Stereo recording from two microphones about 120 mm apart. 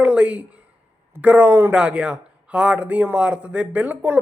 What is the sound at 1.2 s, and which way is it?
Speech, 15° right (ahead or behind).